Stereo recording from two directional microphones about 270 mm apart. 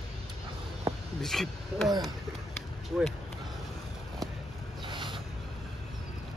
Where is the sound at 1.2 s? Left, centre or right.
Centre.